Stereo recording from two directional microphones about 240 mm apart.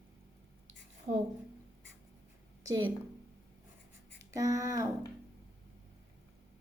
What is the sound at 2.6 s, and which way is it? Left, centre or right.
Speech, centre.